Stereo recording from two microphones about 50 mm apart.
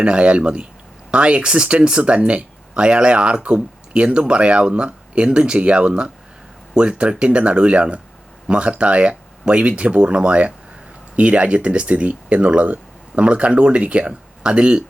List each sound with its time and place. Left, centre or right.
0.0 s speech: right